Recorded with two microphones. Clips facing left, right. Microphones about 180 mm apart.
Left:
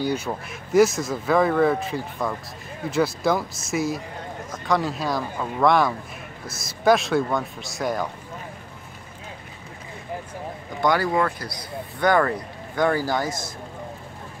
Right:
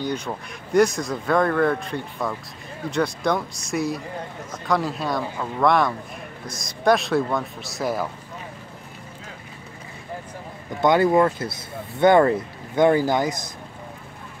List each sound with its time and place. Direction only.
0.0 s speech: 5° left (ahead or behind)
10.8 s speech: 20° right (ahead or behind)